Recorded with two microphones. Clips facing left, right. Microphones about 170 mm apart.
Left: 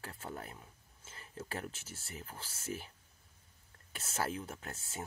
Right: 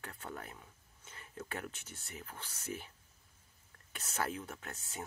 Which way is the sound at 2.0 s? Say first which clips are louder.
Even; 35° left (ahead or behind).